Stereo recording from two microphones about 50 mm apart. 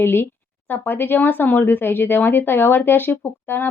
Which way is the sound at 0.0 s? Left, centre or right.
Left.